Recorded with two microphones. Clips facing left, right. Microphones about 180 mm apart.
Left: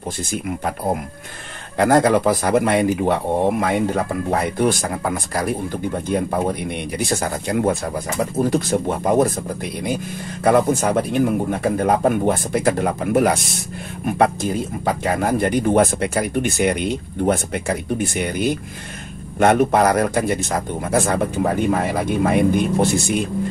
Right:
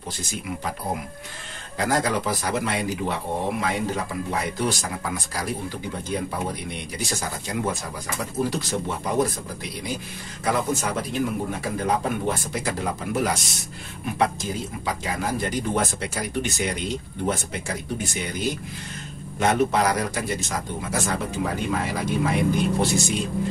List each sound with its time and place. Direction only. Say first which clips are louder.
0.2 s speech: left 6 dB; 55° left (ahead or behind)
1.8 s speech: left 9 dB; 60° left (ahead or behind)
10.4 s speech: left 9 dB; 55° left (ahead or behind)